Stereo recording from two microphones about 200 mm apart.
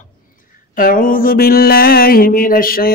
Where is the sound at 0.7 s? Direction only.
45° left (ahead or behind).